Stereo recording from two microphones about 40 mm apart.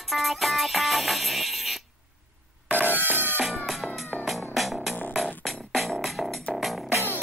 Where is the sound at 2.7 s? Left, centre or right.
Right.